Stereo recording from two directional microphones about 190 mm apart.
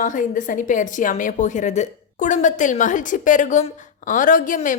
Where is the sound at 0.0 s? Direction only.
40° left (ahead or behind).